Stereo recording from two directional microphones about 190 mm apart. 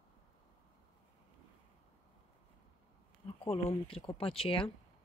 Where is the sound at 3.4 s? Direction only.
30° left (ahead or behind).